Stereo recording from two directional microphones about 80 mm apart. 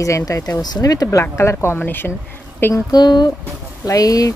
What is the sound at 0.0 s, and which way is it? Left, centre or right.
Speech, left.